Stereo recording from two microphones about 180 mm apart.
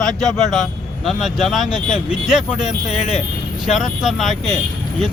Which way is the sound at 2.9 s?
35° left (ahead or behind).